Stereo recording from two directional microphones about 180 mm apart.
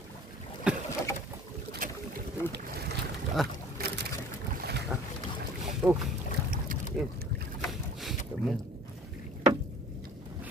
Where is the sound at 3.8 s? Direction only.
55° right (ahead or behind).